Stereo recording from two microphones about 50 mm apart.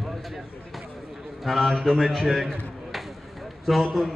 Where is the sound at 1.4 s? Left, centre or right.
Centre.